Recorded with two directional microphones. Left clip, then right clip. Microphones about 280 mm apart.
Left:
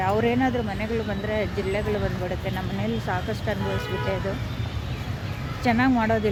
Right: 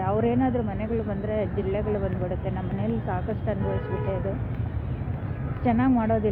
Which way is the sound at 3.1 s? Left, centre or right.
Centre.